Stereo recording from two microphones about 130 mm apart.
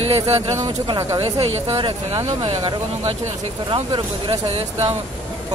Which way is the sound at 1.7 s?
40° right (ahead or behind).